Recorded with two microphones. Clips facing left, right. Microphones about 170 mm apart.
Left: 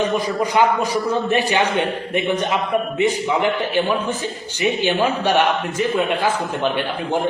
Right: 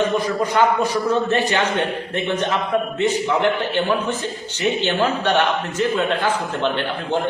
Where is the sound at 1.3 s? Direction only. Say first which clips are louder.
Left 1 dB; 10° left (ahead or behind).